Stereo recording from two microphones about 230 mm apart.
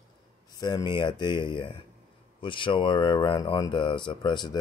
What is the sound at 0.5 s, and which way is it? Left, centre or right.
Speech, centre.